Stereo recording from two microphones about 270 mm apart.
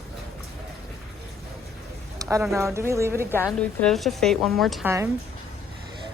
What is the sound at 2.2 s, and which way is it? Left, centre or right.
Speech, centre.